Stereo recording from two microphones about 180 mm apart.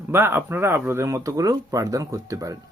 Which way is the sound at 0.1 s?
10° right (ahead or behind).